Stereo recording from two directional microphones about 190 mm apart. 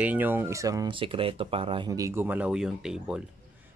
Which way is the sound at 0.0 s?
10° right (ahead or behind).